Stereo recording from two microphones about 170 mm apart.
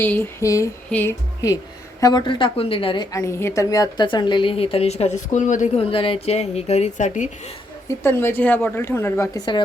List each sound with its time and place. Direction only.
0.0 s a woman's voice: 15° left (ahead or behind); by 5.8 s 45° left (ahead or behind)
5.9 s speech: 35° left (ahead or behind)
7.9 s speech: 15° left (ahead or behind)